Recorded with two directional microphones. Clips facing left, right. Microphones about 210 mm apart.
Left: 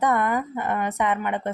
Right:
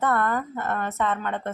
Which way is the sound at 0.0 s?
15° left (ahead or behind).